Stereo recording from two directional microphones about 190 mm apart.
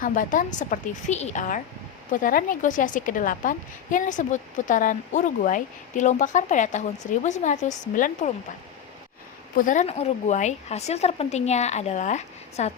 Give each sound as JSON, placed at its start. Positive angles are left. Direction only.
{"t": 0.0, "sound": "a woman's voice", "side_deg": 45}
{"t": 9.6, "sound": "speech", "side_deg": 40}